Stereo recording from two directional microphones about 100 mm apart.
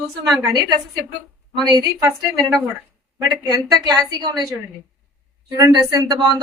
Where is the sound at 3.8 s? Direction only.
45° right (ahead or behind).